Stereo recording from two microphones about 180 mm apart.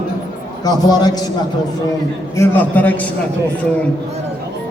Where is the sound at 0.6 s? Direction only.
20° left (ahead or behind).